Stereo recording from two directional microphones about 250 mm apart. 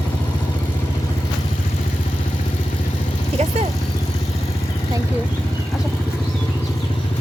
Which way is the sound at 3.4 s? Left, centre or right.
Right.